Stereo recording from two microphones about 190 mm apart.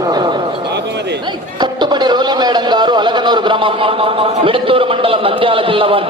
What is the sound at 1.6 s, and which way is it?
A man's voice, 20° right (ahead or behind).